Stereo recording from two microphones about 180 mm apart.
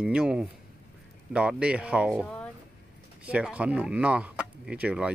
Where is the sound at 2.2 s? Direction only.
5° left (ahead or behind).